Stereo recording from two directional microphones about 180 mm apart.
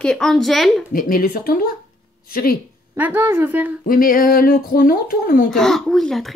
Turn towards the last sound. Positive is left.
turn(degrees=0)  # may be behind; listen again after turning